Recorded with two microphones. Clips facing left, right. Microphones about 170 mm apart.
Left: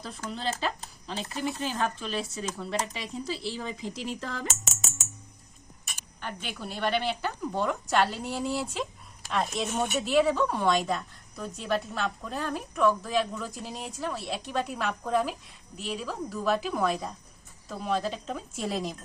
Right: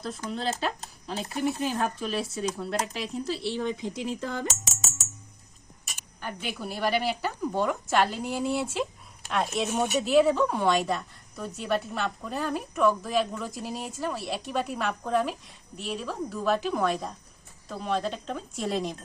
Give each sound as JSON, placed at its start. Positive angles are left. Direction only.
{"t": 0.3, "sound": "a woman's voice", "side_deg": 0}
{"t": 6.1, "sound": "a woman's voice", "side_deg": -5}